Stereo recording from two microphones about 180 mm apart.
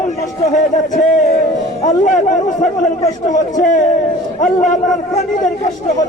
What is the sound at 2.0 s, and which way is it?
A man's voice, 45° left (ahead or behind).